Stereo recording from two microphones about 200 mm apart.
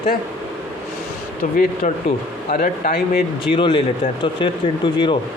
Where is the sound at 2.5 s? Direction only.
50° left (ahead or behind).